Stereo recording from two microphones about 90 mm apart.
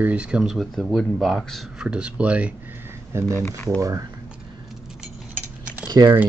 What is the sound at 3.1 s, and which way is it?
Speech, 30° right (ahead or behind).